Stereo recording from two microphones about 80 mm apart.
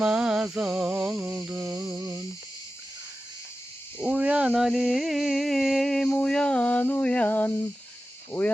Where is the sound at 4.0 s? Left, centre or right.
Centre.